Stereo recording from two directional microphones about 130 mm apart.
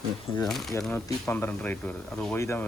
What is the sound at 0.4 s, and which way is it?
Speech, 5° left (ahead or behind).